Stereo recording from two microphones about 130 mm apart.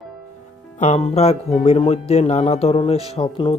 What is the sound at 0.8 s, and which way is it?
Speech, 55° left (ahead or behind).